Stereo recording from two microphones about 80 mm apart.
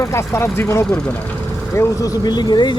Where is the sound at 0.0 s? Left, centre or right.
Left.